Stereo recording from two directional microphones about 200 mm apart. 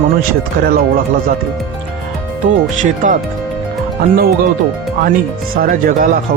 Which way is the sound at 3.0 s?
40° right (ahead or behind).